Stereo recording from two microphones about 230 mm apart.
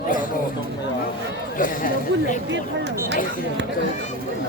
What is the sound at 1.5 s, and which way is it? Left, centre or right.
Speech, left.